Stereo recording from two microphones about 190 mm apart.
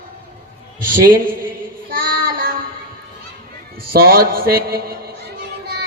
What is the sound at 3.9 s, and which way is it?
A man's voice, 50° right (ahead or behind).